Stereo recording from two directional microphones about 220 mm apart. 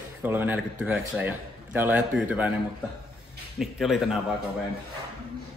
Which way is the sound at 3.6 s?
Centre (ahead or behind).